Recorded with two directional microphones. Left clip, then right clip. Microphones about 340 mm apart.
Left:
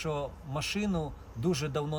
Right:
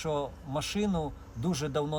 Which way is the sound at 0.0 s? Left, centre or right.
Centre.